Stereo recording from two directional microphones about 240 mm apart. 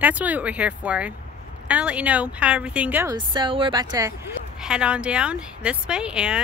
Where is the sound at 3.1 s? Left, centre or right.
Centre.